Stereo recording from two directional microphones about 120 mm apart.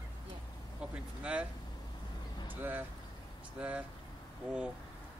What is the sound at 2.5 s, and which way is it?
Speech, 15° right (ahead or behind).